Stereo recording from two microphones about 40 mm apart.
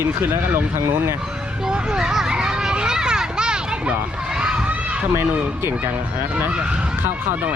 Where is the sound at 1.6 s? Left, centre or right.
Centre.